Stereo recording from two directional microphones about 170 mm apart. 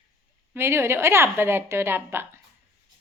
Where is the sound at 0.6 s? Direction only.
15° right (ahead or behind).